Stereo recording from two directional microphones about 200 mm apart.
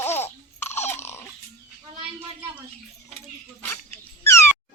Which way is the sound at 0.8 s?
10° left (ahead or behind).